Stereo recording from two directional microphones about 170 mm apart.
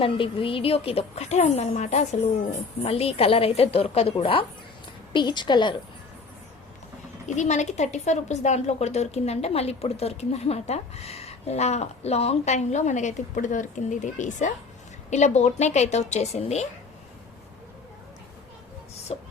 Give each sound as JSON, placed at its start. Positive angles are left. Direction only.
{"t": 0.0, "sound": "a woman's voice", "side_deg": 30}
{"t": 7.3, "sound": "a woman's voice", "side_deg": 45}
{"t": 19.1, "sound": "a woman's voice", "side_deg": 40}